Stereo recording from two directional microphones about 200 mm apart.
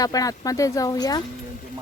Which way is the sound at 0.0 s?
20° left (ahead or behind).